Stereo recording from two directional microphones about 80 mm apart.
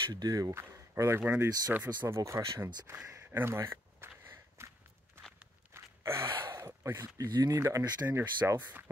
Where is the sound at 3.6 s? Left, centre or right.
Right.